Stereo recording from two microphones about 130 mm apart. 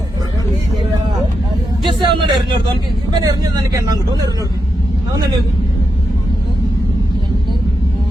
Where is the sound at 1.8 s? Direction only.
35° right (ahead or behind).